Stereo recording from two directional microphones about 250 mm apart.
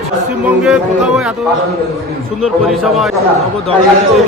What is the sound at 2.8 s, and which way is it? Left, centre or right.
Speech, centre.